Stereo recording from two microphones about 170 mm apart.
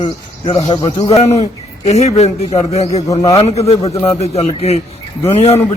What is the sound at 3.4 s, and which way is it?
A man's voice, 40° left (ahead or behind).